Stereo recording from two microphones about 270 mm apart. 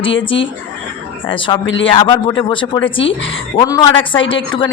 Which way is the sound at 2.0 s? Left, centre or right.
Centre.